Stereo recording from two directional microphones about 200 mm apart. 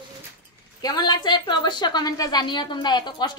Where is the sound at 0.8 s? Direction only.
20° left (ahead or behind).